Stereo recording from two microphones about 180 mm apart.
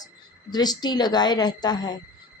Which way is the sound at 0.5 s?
20° left (ahead or behind).